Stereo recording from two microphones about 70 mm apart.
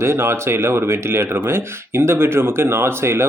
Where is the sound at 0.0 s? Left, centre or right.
Right.